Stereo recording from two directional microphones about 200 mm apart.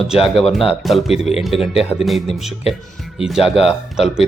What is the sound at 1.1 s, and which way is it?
Speech, 30° left (ahead or behind).